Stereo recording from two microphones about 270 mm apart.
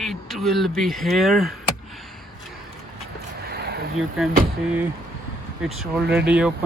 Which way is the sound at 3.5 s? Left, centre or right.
Right.